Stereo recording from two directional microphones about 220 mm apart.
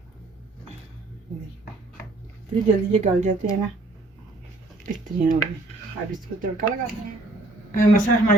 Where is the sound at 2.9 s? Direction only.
30° right (ahead or behind).